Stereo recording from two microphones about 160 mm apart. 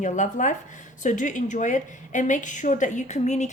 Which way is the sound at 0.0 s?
50° left (ahead or behind).